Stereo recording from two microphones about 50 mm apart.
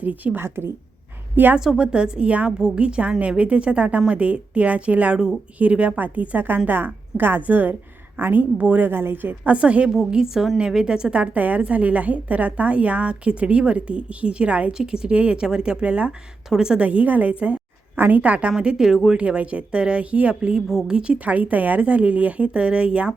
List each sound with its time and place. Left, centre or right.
0.0 s speech: right
0.4 s a woman's voice: right
1.5 s a woman's voice: centre; by 8.9 s right
8.9 s a woman's voice: right
9.4 s a woman's voice: right
9.9 s a woman's voice: centre
14.7 s a woman's voice: centre
16.5 s speech: centre
16.8 s a woman's voice: right
17.9 s a woman's voice: right
18.2 s a woman's voice: right
20.7 s speech: centre
20.9 s a woman's voice: right